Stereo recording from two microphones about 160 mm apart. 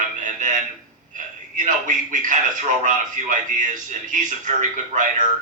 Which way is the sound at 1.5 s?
50° right (ahead or behind).